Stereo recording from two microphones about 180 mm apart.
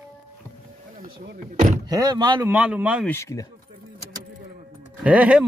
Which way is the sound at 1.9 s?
20° right (ahead or behind).